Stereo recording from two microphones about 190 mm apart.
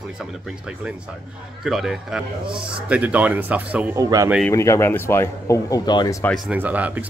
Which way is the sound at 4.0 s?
20° right (ahead or behind).